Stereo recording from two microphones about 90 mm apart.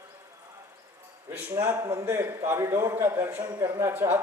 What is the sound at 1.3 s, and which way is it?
Speech, 20° right (ahead or behind).